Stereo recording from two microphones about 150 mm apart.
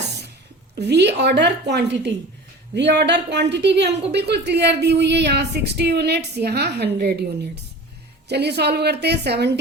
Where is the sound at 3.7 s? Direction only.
90° right.